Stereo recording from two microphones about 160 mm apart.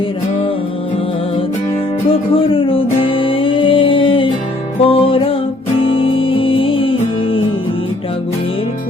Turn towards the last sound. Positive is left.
turn(degrees=35)  # may be behind; listen again after turning